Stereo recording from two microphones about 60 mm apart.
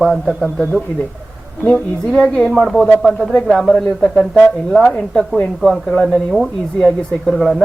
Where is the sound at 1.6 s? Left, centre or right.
Centre.